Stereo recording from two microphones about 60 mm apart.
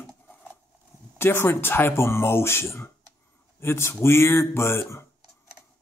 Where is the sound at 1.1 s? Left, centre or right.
Left.